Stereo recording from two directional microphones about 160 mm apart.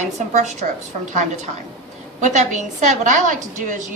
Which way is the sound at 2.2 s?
50° right (ahead or behind).